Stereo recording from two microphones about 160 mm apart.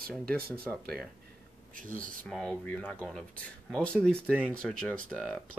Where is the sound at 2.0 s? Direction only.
5° left (ahead or behind).